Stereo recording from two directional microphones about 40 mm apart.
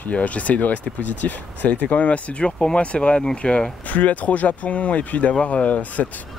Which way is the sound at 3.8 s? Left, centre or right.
Left.